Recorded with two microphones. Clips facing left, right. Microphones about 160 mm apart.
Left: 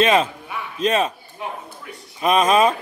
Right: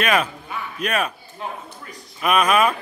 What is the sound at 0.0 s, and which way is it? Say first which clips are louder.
A man's voice: left 4 dB; 25° left (ahead or behind).